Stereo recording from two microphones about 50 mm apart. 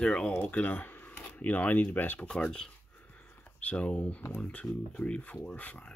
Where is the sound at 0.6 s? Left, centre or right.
Left.